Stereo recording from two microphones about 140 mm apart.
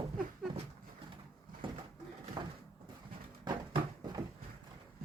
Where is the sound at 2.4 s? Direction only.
25° right (ahead or behind).